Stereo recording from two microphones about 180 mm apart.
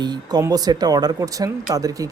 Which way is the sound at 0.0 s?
25° right (ahead or behind).